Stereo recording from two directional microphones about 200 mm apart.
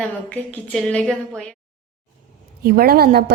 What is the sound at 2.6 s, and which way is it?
Speech, 50° right (ahead or behind).